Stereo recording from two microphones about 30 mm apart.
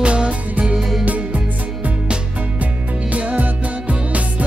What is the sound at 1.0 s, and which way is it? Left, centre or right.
Music, right.